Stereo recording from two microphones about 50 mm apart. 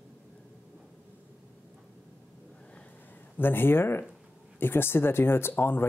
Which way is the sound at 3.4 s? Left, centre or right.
Left.